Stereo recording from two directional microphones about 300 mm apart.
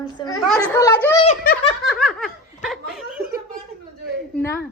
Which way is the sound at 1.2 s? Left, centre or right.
Left.